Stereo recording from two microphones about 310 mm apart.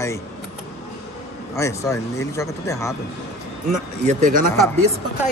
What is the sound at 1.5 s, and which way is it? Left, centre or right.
Speech, centre.